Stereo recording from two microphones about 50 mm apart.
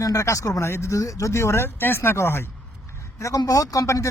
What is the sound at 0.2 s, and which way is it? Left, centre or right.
Speech, left.